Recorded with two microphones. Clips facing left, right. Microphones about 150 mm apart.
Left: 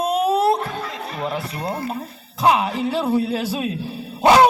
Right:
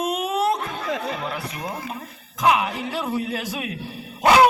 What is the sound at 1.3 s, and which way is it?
Speech, 35° left (ahead or behind).